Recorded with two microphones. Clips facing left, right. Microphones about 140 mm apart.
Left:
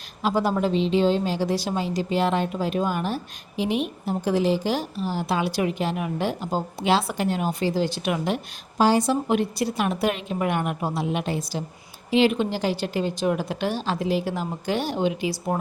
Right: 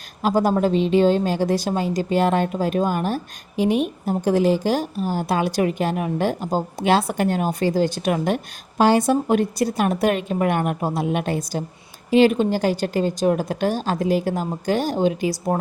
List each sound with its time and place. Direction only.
0.2 s a woman's voice: 45° right (ahead or behind)
8.8 s a woman's voice: 60° right (ahead or behind); by 11.0 s 40° right (ahead or behind)
11.0 s a woman's voice: 50° right (ahead or behind)